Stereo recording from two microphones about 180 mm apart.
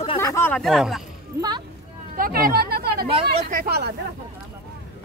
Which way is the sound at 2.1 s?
55° right (ahead or behind).